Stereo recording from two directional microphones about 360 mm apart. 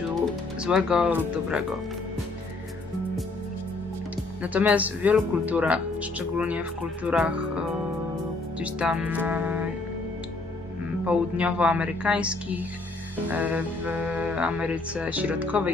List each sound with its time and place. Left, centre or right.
0.6 s speech: centre
4.4 s speech: centre
11.1 s speech: centre